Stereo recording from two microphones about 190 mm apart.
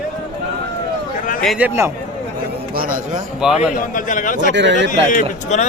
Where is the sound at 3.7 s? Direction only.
45° left (ahead or behind).